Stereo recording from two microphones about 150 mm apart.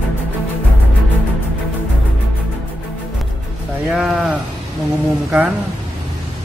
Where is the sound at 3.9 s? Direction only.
5° right (ahead or behind).